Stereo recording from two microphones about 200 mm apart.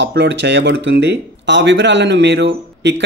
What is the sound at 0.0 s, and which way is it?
Speech, 60° right (ahead or behind).